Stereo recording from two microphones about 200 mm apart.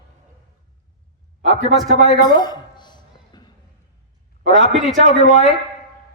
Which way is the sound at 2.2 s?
20° left (ahead or behind).